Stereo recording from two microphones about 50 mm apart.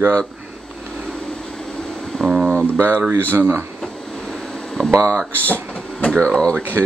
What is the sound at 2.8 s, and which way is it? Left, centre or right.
Speech, right.